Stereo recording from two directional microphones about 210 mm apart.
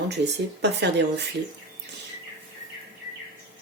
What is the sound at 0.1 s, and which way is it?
Speech, 50° right (ahead or behind).